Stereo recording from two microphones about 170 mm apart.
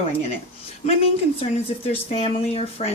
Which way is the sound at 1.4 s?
35° left (ahead or behind).